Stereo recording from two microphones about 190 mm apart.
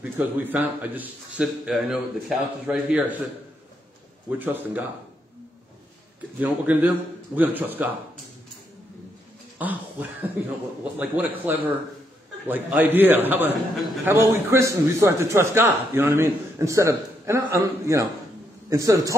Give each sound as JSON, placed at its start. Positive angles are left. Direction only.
{"t": 0.0, "sound": "a man's voice", "side_deg": -10}
{"t": 4.3, "sound": "a man's voice", "side_deg": -10}
{"t": 6.4, "sound": "a man's voice", "side_deg": -10}
{"t": 9.6, "sound": "a man's voice", "side_deg": -10}